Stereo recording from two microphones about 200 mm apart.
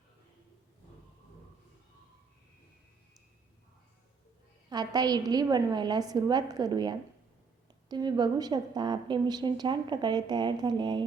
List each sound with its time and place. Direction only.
4.7 s a woman's voice: 20° right (ahead or behind)